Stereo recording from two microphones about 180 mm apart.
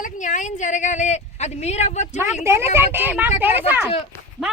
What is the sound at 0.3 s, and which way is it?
A woman's voice, 45° left (ahead or behind).